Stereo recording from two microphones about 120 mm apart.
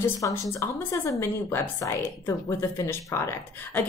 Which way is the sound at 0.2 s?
25° left (ahead or behind).